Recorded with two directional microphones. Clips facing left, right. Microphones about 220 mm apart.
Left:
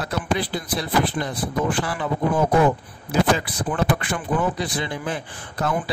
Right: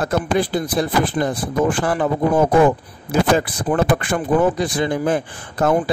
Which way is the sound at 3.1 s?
50° right (ahead or behind).